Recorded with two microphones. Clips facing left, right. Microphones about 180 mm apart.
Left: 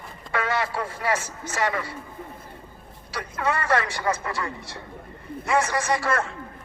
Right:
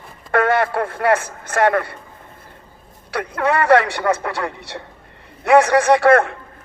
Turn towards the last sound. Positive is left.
turn(degrees=-60)  # may be behind; listen again after turning